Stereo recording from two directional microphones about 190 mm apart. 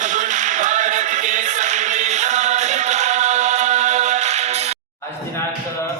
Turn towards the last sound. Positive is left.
turn(degrees=-35)  # may be behind; listen again after turning